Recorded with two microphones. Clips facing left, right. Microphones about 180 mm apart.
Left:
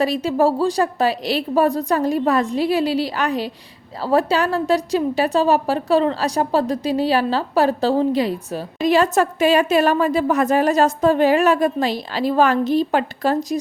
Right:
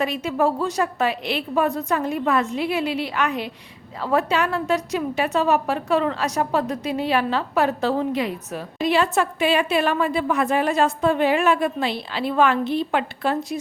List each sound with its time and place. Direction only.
0.0 s a woman's voice: 35° left (ahead or behind)